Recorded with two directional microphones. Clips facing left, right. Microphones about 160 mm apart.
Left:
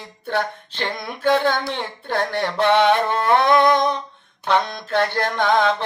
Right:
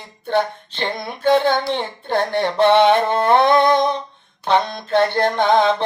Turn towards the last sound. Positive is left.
turn(degrees=-25)  # may be behind; listen again after turning